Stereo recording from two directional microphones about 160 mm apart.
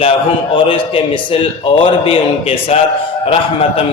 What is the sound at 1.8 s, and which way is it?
A man's voice, 35° left (ahead or behind).